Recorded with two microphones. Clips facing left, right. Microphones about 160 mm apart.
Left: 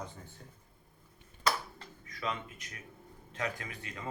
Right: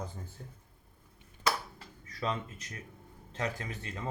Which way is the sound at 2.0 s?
35° right (ahead or behind).